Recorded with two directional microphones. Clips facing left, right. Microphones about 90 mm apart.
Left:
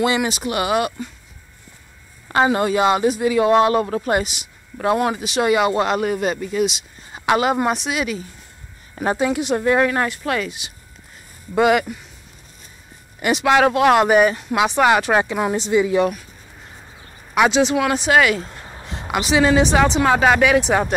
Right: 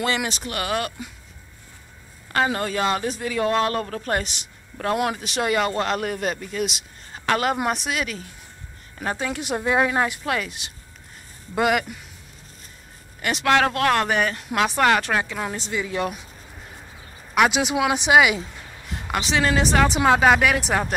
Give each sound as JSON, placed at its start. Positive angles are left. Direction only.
{"t": 0.0, "sound": "speech", "side_deg": 10}
{"t": 2.2, "sound": "speech", "side_deg": 20}
{"t": 7.1, "sound": "a sound", "side_deg": 15}
{"t": 7.6, "sound": "speech", "side_deg": 0}
{"t": 9.4, "sound": "speech", "side_deg": -5}
{"t": 13.3, "sound": "speech", "side_deg": 5}
{"t": 17.5, "sound": "speech", "side_deg": -10}
{"t": 19.0, "sound": "speech", "side_deg": 10}